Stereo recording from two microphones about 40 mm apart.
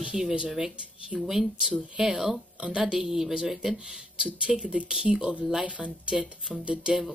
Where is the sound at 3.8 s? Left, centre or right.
Centre.